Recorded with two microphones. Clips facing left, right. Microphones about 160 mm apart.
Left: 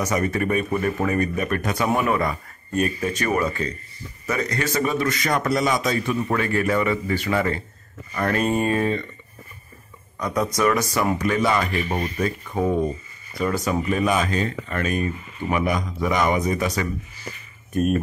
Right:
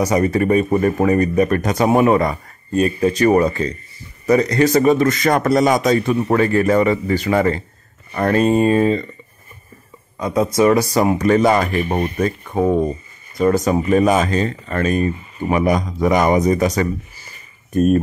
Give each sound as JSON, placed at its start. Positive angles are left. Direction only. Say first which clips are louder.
{"t": 0.0, "sound": "a man's voice", "louder": "right 7 dB", "side_deg": -35}
{"t": 8.2, "sound": "speech", "louder": "right 7 dB", "side_deg": -30}
{"t": 10.1, "sound": "a man's voice", "louder": "right 6 dB", "side_deg": -25}